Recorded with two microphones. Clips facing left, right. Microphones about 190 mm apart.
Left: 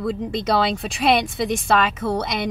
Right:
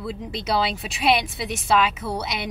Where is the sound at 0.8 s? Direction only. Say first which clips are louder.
Left 2 dB; centre (ahead or behind).